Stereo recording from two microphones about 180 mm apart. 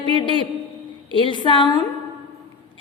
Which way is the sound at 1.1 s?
25° left (ahead or behind).